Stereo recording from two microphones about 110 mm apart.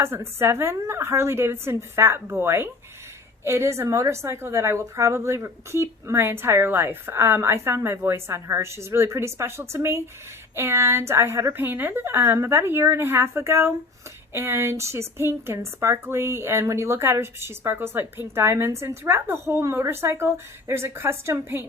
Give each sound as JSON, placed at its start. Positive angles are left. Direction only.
{"t": 0.0, "sound": "a woman's voice", "side_deg": -25}